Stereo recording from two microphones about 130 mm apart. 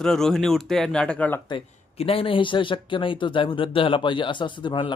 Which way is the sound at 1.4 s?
45° left (ahead or behind).